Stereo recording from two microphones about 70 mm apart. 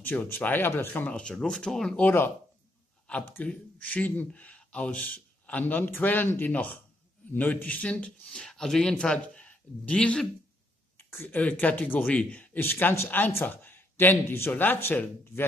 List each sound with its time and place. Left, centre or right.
0.2 s speech: left
1.3 s speech: centre
2.0 s a man's voice: left
3.4 s speech: left
11.0 s a sound: left
11.2 s speech: left
12.5 s a man's voice: left